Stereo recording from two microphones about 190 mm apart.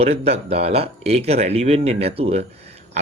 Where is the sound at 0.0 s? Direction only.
35° right (ahead or behind).